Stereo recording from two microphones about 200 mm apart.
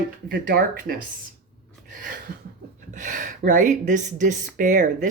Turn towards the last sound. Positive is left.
turn(degrees=-40)  # may be behind; listen again after turning